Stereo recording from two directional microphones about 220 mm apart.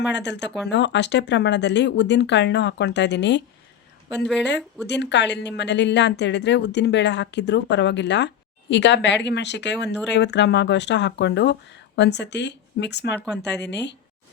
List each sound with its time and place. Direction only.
0.1 s a woman's voice: 50° left (ahead or behind)
4.9 s a woman's voice: 50° left (ahead or behind)